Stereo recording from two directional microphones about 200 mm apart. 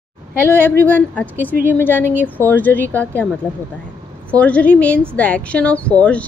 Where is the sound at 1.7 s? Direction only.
10° left (ahead or behind).